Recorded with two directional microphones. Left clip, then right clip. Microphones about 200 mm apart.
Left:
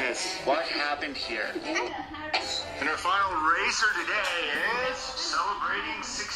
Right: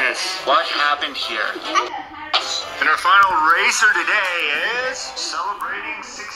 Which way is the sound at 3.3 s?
35° right (ahead or behind).